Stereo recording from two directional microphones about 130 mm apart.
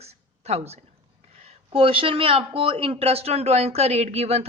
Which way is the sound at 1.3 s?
55° right (ahead or behind).